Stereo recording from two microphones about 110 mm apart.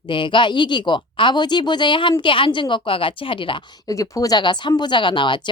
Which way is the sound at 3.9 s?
30° left (ahead or behind).